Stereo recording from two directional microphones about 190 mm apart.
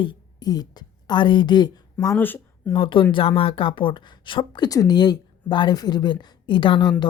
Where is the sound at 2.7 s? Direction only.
25° left (ahead or behind).